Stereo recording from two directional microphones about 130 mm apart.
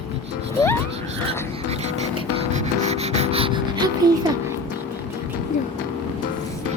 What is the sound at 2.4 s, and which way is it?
Music, 60° right (ahead or behind).